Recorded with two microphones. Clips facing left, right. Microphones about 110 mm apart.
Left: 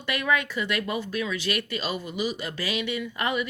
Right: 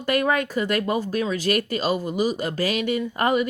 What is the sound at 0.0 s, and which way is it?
Speech, 45° right (ahead or behind).